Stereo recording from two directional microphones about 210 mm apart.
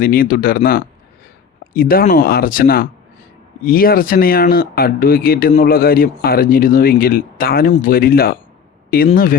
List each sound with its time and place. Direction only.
0.0 s speech: 45° left (ahead or behind)